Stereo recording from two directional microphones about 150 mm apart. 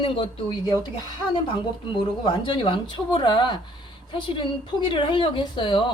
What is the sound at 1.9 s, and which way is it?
A woman's voice, 35° left (ahead or behind).